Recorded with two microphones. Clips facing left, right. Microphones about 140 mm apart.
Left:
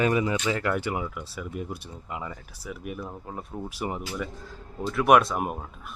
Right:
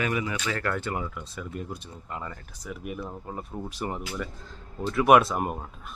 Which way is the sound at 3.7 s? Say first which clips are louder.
Left 1 dB; 10° left (ahead or behind).